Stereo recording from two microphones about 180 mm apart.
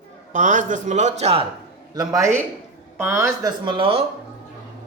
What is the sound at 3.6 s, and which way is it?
Speech, 30° right (ahead or behind).